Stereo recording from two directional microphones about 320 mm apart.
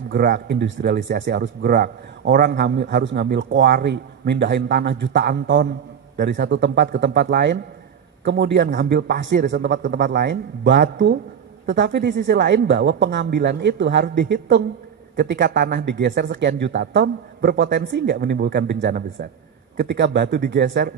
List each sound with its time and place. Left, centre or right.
0.1 s speech: right